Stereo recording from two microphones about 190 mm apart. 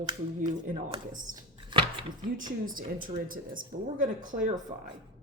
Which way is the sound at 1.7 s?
25° right (ahead or behind).